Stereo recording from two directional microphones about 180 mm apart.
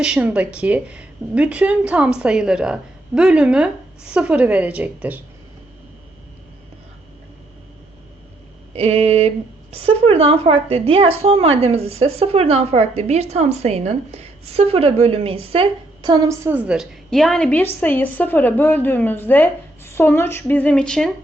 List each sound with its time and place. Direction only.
0.0 s a woman's voice: 5° right (ahead or behind)
8.7 s a woman's voice: 35° right (ahead or behind); by 21.1 s 5° left (ahead or behind)